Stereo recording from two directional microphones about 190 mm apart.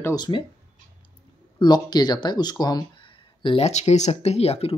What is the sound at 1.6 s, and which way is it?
Speech, 20° left (ahead or behind).